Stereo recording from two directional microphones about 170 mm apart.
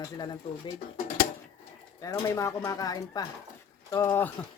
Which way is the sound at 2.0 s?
20° left (ahead or behind).